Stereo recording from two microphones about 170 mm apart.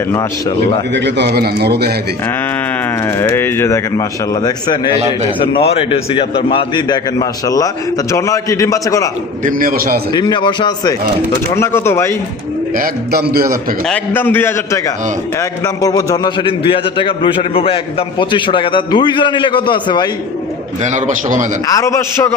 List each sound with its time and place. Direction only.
0.9 s a man's voice: 90° right; by 1.9 s 70° right (ahead or behind)
3.1 s a man's voice: 15° left (ahead or behind)
9.4 s a man's voice: 55° right (ahead or behind)
10.1 s a man's voice: 25° left (ahead or behind)
11.5 s a man's voice: 15° left (ahead or behind)
12.7 s a man's voice: 60° right (ahead or behind)
13.8 s a man's voice: 10° left (ahead or behind); by 20.1 s 25° left (ahead or behind)
20.8 s a man's voice: 45° right (ahead or behind)
21.8 s a man's voice: 20° left (ahead or behind)